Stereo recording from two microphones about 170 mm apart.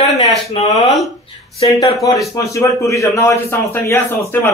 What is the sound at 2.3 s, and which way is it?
A man's voice, 20° left (ahead or behind).